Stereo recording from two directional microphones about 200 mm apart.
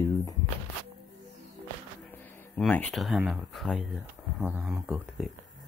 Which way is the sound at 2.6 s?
5° left (ahead or behind).